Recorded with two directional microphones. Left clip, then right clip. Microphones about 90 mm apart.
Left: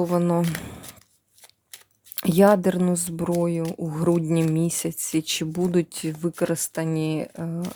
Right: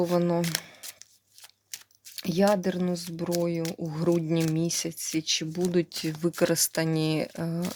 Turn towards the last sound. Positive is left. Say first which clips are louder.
# even
turn(degrees=20)  # may be behind; listen again after turning